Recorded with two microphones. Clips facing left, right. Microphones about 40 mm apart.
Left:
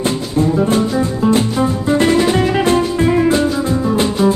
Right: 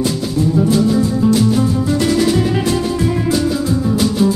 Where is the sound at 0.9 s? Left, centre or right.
Left.